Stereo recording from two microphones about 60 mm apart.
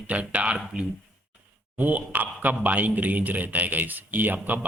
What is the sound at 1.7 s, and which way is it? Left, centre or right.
A man's voice, right.